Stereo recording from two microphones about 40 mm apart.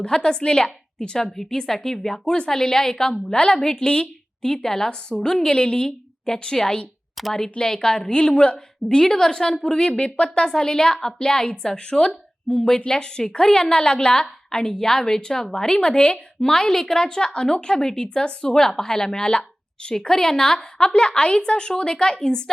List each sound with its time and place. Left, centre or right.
0.0 s a woman's voice: centre
7.2 s a sound: centre
7.6 s a woman's voice: centre
16.4 s a woman's voice: centre